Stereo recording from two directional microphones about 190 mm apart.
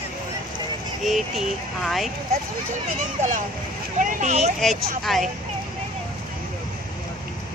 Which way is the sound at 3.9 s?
40° right (ahead or behind).